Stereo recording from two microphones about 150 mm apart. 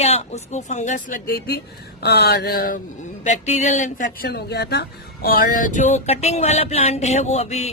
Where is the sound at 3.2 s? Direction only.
50° left (ahead or behind).